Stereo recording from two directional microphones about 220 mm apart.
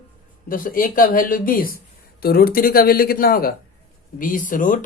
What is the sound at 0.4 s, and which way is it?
Speech, 40° left (ahead or behind).